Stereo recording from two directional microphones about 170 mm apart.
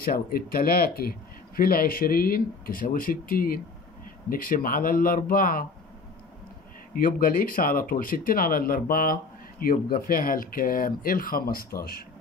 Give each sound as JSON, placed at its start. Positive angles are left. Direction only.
{"t": 0.0, "sound": "speech", "side_deg": 60}
{"t": 6.9, "sound": "speech", "side_deg": 55}